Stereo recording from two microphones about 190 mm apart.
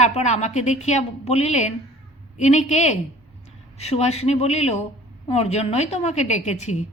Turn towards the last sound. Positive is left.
turn(degrees=35)  # may be behind; listen again after turning